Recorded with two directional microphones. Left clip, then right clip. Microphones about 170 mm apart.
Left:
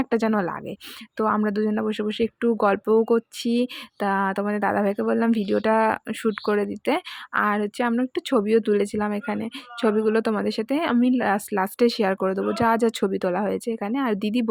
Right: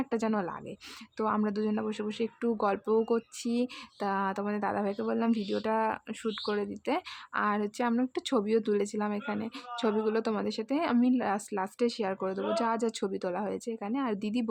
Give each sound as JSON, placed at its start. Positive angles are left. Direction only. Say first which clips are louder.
{"t": 0.0, "sound": "a woman's voice", "louder": "left 8 dB", "side_deg": 30}